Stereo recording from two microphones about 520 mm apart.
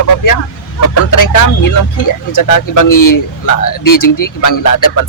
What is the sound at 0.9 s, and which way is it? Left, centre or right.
A man's voice, left.